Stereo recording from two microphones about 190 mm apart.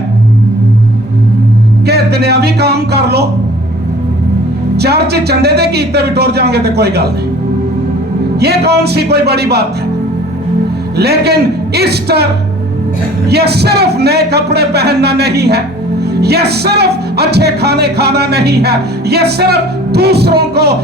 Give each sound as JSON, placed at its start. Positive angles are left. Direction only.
{"t": 1.9, "sound": "music", "side_deg": -55}
{"t": 4.8, "sound": "music", "side_deg": -60}
{"t": 8.4, "sound": "music", "side_deg": -60}
{"t": 10.9, "sound": "music", "side_deg": -60}